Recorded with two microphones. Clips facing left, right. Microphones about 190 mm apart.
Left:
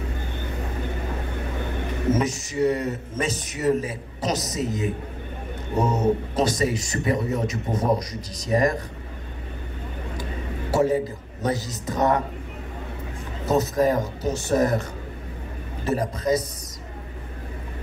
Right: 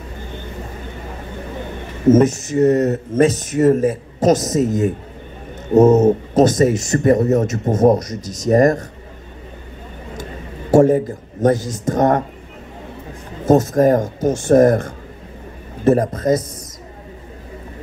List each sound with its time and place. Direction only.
2.0 s speech: 50° right (ahead or behind)
10.7 s speech: 50° right (ahead or behind)
13.5 s speech: 50° right (ahead or behind)